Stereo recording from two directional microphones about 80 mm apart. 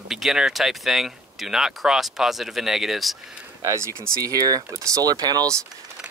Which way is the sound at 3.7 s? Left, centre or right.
Right.